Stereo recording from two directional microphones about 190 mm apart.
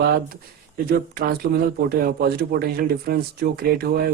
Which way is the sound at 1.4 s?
60° right (ahead or behind).